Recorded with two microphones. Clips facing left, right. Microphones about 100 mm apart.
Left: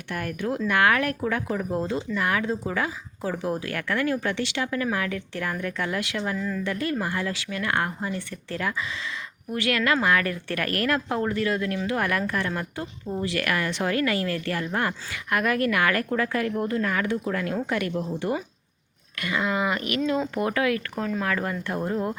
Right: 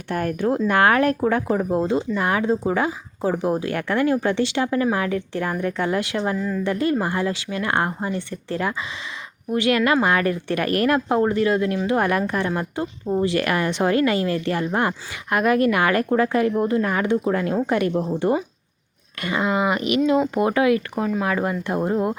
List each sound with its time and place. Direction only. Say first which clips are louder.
0.1 s a woman's voice: right 7 dB; 35° right (ahead or behind)